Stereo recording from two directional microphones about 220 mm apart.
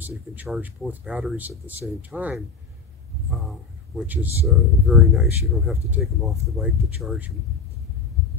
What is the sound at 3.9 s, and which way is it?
Speech, 10° right (ahead or behind).